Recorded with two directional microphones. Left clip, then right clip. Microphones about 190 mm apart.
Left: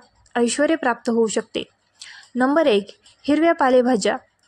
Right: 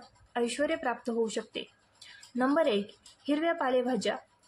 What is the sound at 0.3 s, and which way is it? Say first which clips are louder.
Speech: left 11 dB; 45° left (ahead or behind).